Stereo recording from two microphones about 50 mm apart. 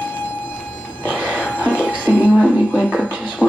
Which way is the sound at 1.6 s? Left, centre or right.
Left.